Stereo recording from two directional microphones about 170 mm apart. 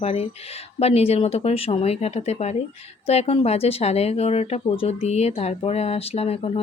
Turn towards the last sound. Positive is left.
turn(degrees=35)  # may be behind; listen again after turning